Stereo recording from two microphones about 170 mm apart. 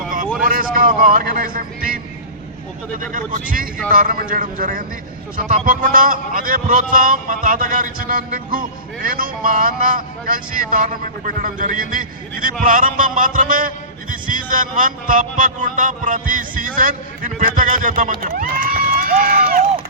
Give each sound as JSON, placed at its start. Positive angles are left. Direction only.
{"t": 0.4, "sound": "a man's voice", "side_deg": -55}
{"t": 3.1, "sound": "a man's voice", "side_deg": -50}